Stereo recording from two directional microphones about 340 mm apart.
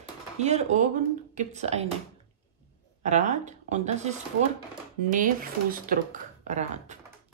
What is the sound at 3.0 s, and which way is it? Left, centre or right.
Speech, right.